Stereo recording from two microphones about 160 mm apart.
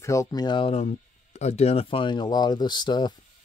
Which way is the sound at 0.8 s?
45° left (ahead or behind).